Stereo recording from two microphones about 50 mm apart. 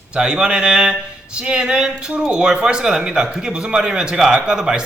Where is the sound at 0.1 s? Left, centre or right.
Centre.